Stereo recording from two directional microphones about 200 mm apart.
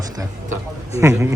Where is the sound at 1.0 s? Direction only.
10° right (ahead or behind).